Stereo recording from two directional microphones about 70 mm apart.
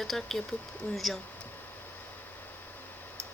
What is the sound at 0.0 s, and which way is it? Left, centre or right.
Speech, centre.